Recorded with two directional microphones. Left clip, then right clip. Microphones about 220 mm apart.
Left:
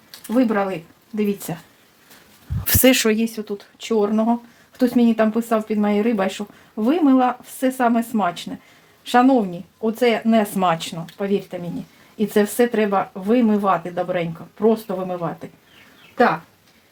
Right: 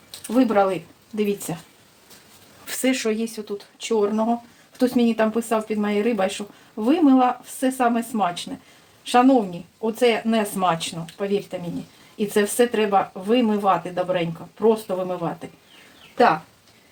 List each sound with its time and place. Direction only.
0.3 s speech: 20° left (ahead or behind)
2.6 s speech: 45° left (ahead or behind)